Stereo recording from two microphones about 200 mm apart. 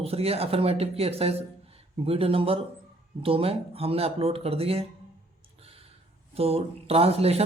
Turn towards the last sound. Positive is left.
turn(degrees=-30)  # may be behind; listen again after turning